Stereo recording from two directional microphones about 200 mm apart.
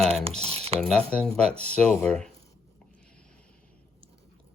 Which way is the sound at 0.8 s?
5° left (ahead or behind).